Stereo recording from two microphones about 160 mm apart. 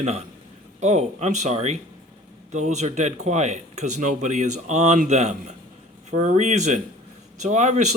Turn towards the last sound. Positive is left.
turn(degrees=-50)  # may be behind; listen again after turning